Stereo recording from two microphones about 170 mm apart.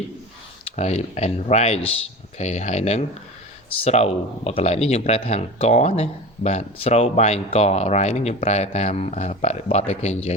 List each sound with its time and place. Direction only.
0.6 s speech: 40° left (ahead or behind)